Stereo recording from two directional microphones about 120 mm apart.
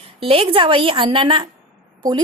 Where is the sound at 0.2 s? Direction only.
50° right (ahead or behind).